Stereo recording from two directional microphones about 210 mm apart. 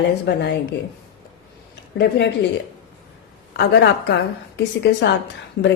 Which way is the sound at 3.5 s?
55° left (ahead or behind).